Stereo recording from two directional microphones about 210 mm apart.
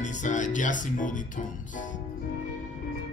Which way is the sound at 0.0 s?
35° left (ahead or behind).